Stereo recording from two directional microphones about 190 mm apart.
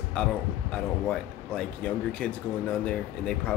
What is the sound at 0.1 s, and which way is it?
A man's voice, 5° left (ahead or behind).